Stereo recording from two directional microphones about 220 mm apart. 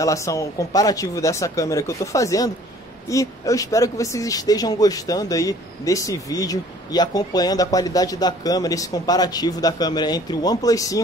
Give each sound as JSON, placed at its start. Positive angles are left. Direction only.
{"t": 0.0, "sound": "speech", "side_deg": 15}